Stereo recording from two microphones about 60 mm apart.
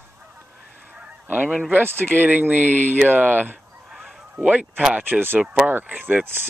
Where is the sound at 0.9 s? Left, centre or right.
Centre.